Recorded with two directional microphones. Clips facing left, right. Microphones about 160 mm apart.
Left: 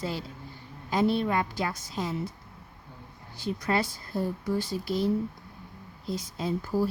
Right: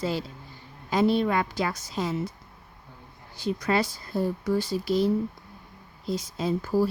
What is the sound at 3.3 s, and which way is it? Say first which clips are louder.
Speech: right 3 dB; 90° right.